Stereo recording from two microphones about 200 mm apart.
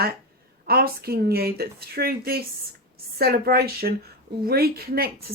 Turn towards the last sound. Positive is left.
turn(degrees=-50)  # may be behind; listen again after turning